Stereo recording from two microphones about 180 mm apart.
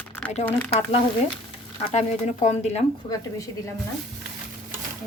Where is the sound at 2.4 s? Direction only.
35° left (ahead or behind).